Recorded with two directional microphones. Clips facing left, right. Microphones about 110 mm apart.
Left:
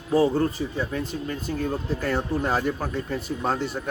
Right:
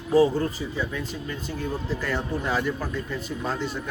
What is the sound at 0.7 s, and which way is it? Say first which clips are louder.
Speech: left 2 dB; 45° left (ahead or behind).